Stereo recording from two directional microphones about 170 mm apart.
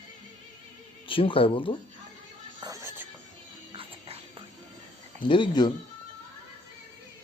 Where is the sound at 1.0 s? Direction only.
30° left (ahead or behind).